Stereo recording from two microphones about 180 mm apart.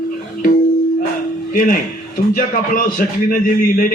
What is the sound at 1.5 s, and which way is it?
A man's voice, 50° left (ahead or behind).